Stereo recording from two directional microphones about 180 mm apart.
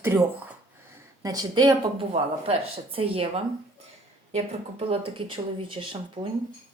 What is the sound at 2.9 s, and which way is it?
Speech, 30° right (ahead or behind).